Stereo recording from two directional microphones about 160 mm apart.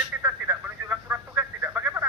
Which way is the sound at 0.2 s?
15° right (ahead or behind).